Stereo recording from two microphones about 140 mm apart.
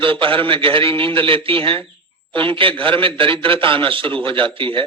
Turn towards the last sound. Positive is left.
turn(degrees=-40)  # may be behind; listen again after turning